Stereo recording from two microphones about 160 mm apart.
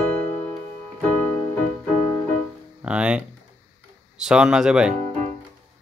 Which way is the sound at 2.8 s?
5° right (ahead or behind).